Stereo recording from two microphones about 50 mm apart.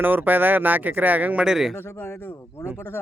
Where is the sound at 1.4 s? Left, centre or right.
Centre.